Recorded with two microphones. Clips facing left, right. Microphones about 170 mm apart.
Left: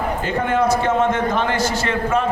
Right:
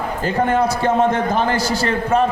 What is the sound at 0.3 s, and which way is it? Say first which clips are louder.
A man's voice: right 2 dB; 35° right (ahead or behind).